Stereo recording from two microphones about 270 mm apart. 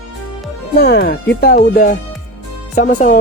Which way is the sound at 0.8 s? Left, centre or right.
Left.